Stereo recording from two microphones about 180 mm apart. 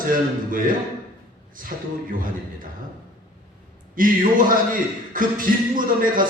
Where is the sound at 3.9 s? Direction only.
50° right (ahead or behind).